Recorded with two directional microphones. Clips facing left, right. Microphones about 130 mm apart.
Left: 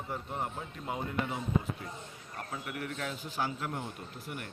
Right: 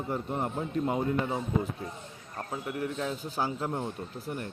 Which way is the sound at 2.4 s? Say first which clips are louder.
Right 6 dB; 30° right (ahead or behind).